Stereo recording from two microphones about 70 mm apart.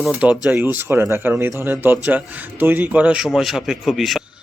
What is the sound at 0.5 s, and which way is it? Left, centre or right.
Speech, right.